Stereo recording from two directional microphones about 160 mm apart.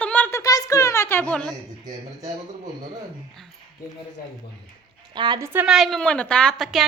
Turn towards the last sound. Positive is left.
turn(degrees=0)  # may be behind; listen again after turning